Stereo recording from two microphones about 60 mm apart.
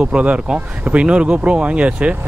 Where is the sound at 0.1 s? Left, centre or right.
Centre.